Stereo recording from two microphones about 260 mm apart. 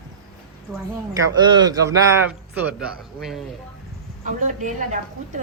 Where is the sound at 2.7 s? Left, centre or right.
Centre.